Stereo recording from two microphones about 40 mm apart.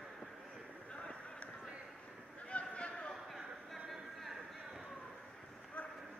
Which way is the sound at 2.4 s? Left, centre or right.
Left.